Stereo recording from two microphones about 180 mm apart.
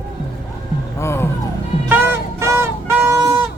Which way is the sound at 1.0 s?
15° left (ahead or behind).